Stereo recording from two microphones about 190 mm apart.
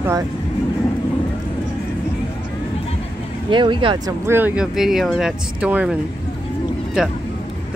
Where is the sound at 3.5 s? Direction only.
25° right (ahead or behind).